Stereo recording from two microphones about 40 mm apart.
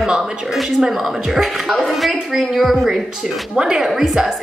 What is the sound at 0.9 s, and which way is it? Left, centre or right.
A woman's voice, centre.